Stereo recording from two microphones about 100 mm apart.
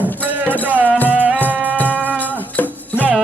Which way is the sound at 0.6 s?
15° right (ahead or behind).